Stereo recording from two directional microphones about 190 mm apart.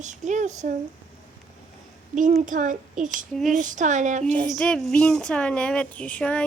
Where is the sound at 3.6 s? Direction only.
40° right (ahead or behind).